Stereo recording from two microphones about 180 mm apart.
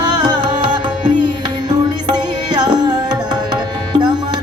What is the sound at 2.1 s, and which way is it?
Tabla, 25° right (ahead or behind).